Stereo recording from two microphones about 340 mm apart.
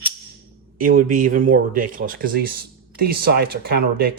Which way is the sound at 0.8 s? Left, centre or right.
Right.